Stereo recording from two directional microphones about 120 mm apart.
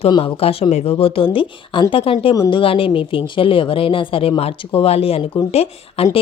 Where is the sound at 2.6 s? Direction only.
50° left (ahead or behind).